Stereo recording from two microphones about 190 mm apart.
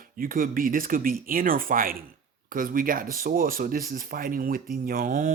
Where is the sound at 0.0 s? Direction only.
50° right (ahead or behind).